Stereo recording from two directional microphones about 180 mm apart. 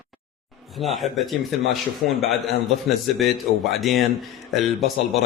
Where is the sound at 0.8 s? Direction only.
Centre (ahead or behind).